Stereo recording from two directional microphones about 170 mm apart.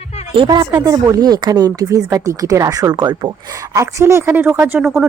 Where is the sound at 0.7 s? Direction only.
15° right (ahead or behind).